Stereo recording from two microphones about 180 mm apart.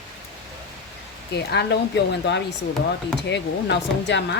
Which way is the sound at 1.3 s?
70° left (ahead or behind).